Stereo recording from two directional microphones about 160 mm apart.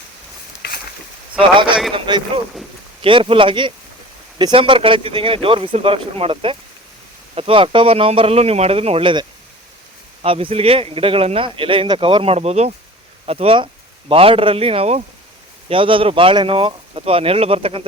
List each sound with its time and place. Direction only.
1.4 s speech: 30° right (ahead or behind)
10.2 s speech: 35° right (ahead or behind)